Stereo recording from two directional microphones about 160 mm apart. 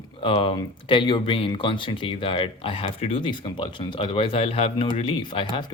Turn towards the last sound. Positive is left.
turn(degrees=30)  # may be behind; listen again after turning